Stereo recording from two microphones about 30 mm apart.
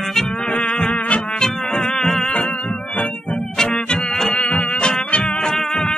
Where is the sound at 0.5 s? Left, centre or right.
Left.